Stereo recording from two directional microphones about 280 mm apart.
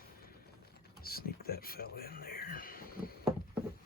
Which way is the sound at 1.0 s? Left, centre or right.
Left.